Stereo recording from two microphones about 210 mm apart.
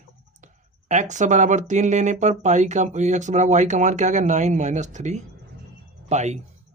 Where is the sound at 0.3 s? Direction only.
35° right (ahead or behind).